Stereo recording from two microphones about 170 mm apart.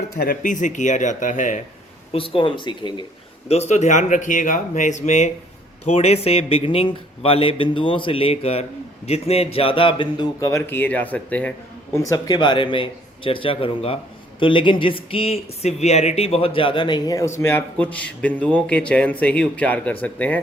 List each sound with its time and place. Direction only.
0.2 s speech: 55° left (ahead or behind)
2.1 s speech: 30° left (ahead or behind)
3.5 s a man's voice: 40° left (ahead or behind); by 11.5 s 10° left (ahead or behind)
12.0 s a man's voice: 20° left (ahead or behind)